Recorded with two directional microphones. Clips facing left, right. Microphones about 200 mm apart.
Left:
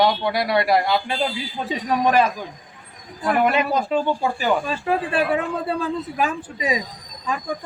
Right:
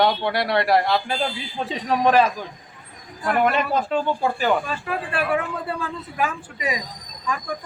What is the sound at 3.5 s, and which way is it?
Speech, 5° left (ahead or behind).